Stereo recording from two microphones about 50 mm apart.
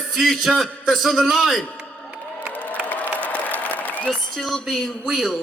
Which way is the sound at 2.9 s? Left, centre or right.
Left.